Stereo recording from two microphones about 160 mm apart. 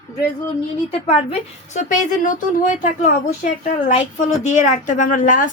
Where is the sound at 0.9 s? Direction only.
35° left (ahead or behind).